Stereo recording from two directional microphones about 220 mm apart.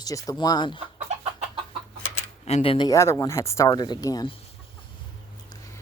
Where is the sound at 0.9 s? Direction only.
30° right (ahead or behind).